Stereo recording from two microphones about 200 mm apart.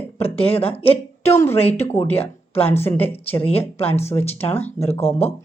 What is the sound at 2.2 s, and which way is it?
Speech, 30° left (ahead or behind).